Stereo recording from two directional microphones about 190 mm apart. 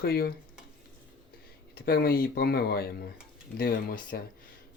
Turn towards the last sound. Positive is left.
turn(degrees=50)  # may be behind; listen again after turning